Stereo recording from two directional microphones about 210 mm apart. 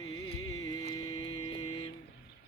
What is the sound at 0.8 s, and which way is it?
Music, 20° left (ahead or behind).